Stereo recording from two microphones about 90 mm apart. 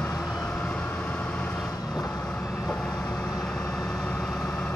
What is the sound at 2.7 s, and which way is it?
Vehicle, 10° left (ahead or behind).